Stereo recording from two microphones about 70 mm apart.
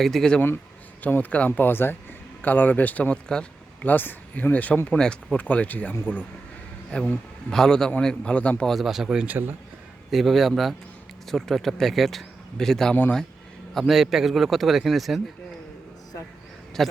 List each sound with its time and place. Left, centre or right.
0.0 s speech: centre
1.0 s speech: left
3.8 s speech: left
6.9 s a man's voice: centre
8.6 s speech: centre
9.2 s speech: right
10.1 s a man's voice: centre
13.7 s speech: centre
16.8 s speech: centre